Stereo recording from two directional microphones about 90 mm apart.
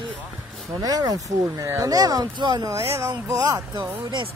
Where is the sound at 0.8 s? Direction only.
45° right (ahead or behind).